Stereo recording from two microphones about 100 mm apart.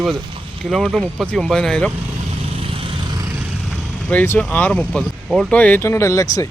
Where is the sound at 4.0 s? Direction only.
10° left (ahead or behind).